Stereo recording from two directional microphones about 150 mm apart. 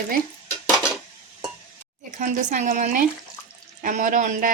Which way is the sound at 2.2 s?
60° right (ahead or behind).